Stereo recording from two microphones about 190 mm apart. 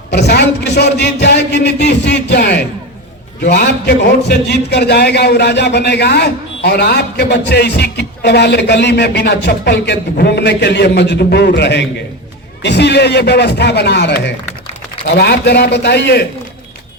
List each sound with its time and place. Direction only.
0.1 s a man's voice: 60° left (ahead or behind)
3.8 s a man's voice: 55° left (ahead or behind)